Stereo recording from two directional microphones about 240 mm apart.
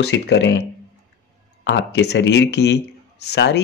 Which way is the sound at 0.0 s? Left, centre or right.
Left.